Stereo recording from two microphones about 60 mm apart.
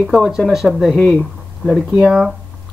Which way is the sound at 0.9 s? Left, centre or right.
Centre.